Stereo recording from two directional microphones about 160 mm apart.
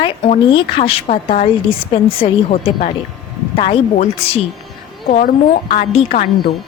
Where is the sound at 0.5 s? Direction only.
35° left (ahead or behind).